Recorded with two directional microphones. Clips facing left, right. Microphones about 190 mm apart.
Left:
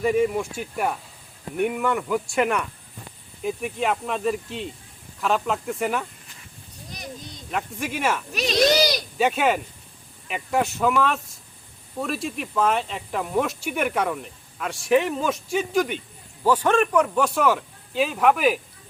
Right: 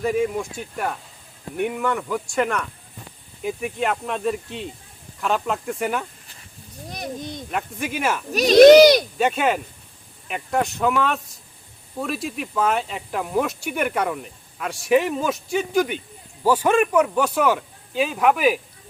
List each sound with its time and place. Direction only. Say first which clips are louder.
0.0 s speech: left 1 dB; 5° left (ahead or behind)
6.9 s a sound: right 7 dB; 55° right (ahead or behind)
7.5 s speech: even; centre (ahead or behind)
8.3 s speech: right 7 dB; 40° right (ahead or behind)
8.5 s speech: right 12 dB; 60° right (ahead or behind)
9.1 s speech: even; centre (ahead or behind)